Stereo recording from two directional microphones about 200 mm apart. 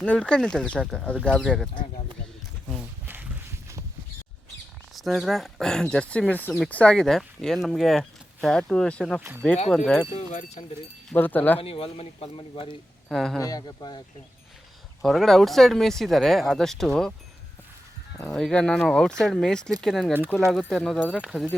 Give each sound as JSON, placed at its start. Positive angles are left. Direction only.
{"t": 0.0, "sound": "speech", "side_deg": 5}
{"t": 4.9, "sound": "speech", "side_deg": 0}
{"t": 10.2, "sound": "speech", "side_deg": 35}
{"t": 11.1, "sound": "speech", "side_deg": 10}
{"t": 11.6, "sound": "speech", "side_deg": 30}
{"t": 13.1, "sound": "speech", "side_deg": 5}
{"t": 13.4, "sound": "speech", "side_deg": 20}
{"t": 15.0, "sound": "speech", "side_deg": 0}
{"t": 18.2, "sound": "speech", "side_deg": 0}